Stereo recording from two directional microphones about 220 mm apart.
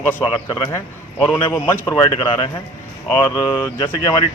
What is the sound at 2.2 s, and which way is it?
Speech, 20° left (ahead or behind).